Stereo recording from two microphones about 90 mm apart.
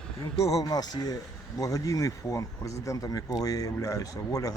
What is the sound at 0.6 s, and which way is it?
Speech, 45° left (ahead or behind).